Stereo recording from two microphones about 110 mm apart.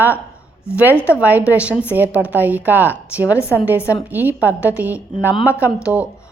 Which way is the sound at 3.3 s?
25° left (ahead or behind).